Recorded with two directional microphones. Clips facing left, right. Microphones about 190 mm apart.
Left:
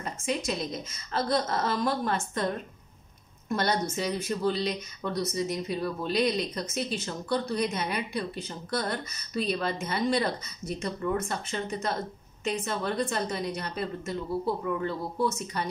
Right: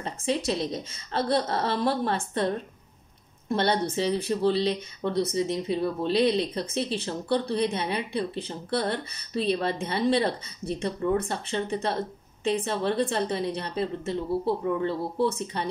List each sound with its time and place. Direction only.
0.0 s a woman's voice: 30° right (ahead or behind)